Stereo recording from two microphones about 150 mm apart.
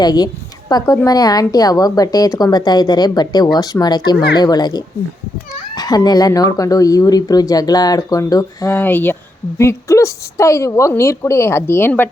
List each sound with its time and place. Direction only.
0.0 s a woman's voice: 25° left (ahead or behind)
8.8 s a woman's voice: 10° left (ahead or behind)